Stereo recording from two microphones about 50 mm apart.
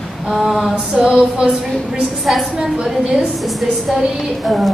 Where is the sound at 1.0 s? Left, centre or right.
Centre.